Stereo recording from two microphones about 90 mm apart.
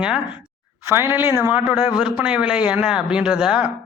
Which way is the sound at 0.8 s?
30° right (ahead or behind).